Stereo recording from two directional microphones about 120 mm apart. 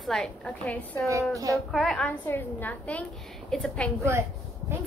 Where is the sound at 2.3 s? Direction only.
15° left (ahead or behind).